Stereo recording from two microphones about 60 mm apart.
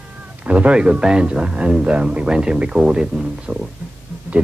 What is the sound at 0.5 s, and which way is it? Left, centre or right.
Speech, right.